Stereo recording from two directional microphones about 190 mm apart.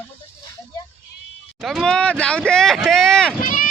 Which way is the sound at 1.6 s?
Centre (ahead or behind).